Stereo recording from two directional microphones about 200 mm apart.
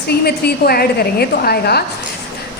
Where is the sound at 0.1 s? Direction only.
50° left (ahead or behind).